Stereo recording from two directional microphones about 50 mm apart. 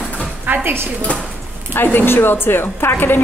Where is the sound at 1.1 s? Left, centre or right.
Left.